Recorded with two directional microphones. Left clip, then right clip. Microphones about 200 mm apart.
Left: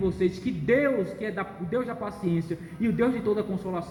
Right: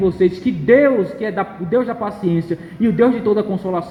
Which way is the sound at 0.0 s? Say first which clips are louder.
Right 11 dB; 45° right (ahead or behind).